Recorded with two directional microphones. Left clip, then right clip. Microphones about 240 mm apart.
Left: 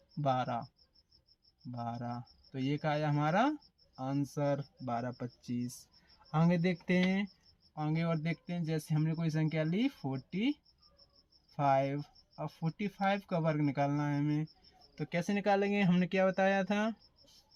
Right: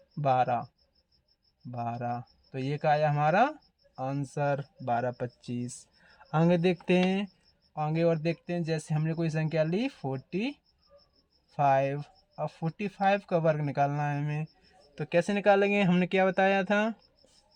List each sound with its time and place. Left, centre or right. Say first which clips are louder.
0.2 s speech: right 7 dB; right
1.7 s speech: right 7 dB; right